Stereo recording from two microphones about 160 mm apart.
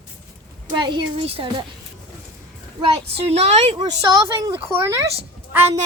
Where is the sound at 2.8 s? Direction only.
35° right (ahead or behind).